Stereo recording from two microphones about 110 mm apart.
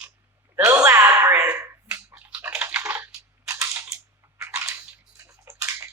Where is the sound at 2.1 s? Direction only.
15° right (ahead or behind).